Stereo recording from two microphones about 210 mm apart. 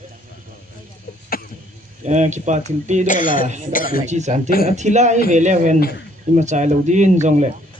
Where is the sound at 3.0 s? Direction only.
40° left (ahead or behind).